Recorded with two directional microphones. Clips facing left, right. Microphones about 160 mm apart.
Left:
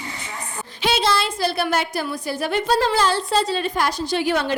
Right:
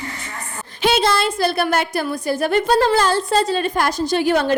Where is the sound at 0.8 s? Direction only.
50° right (ahead or behind).